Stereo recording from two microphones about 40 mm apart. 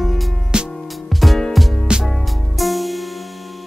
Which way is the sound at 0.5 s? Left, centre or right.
Right.